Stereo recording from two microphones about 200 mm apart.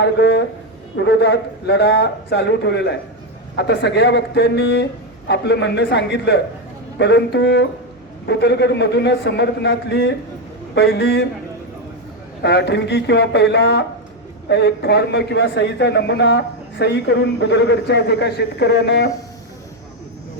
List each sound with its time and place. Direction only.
0.0 s a man's voice: 60° left (ahead or behind)
12.4 s a man's voice: 60° left (ahead or behind)